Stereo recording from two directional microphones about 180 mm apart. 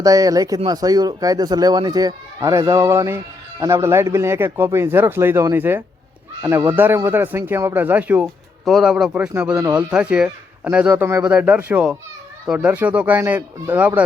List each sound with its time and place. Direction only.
0.0 s a man's voice: 20° right (ahead or behind)